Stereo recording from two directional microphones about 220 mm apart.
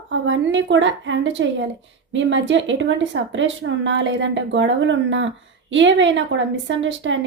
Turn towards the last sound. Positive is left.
turn(degrees=-60)  # may be behind; listen again after turning